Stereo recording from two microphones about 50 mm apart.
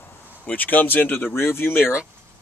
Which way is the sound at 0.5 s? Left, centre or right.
Left.